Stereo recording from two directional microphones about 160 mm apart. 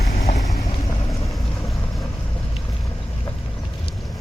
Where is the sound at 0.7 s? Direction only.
30° left (ahead or behind).